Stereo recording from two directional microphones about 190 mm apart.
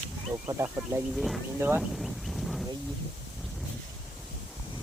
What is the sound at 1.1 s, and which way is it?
Speech, centre (ahead or behind).